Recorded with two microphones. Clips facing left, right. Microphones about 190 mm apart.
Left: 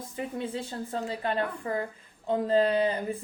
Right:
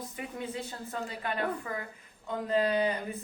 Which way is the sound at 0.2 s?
30° left (ahead or behind).